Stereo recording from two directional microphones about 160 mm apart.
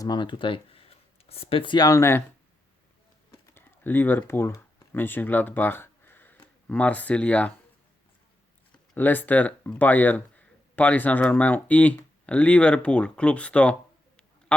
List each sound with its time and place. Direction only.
0.0 s speech: 25° left (ahead or behind)
3.4 s speech: 15° left (ahead or behind)
8.7 s speech: 10° left (ahead or behind)